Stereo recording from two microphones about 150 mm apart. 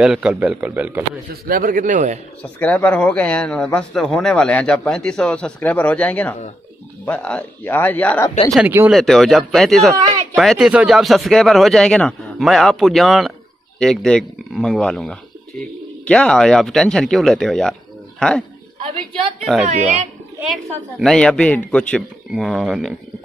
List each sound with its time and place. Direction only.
0.0 s a man's voice: 5° right (ahead or behind)
1.3 s a man's voice: 70° right (ahead or behind)
2.6 s speech: 10° left (ahead or behind)
8.6 s a man's voice: 15° right (ahead or behind)
8.9 s a man's voice: centre (ahead or behind)
19.6 s speech: 50° right (ahead or behind)
21.0 s a man's voice: 5° left (ahead or behind)